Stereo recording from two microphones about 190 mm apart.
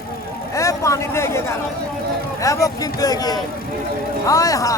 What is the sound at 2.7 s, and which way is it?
A man's voice, 20° left (ahead or behind).